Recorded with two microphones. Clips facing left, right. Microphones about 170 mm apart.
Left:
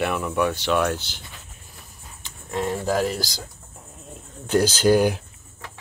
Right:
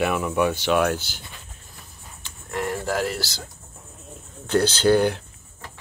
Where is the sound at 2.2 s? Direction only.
20° left (ahead or behind).